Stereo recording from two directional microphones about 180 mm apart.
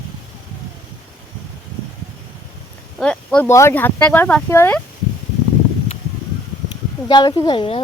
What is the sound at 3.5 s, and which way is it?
Speech, 15° left (ahead or behind).